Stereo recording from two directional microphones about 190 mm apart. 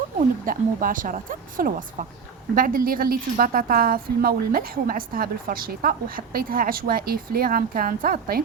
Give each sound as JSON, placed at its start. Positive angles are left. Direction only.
{"t": 0.4, "sound": "a woman's voice", "side_deg": -45}